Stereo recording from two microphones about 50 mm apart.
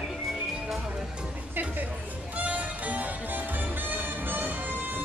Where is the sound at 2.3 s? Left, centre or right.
Right.